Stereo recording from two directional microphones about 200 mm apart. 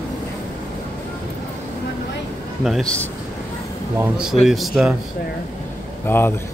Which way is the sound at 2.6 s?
Centre (ahead or behind).